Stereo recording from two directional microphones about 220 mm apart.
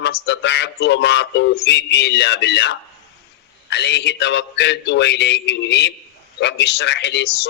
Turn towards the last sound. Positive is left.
turn(degrees=50)  # may be behind; listen again after turning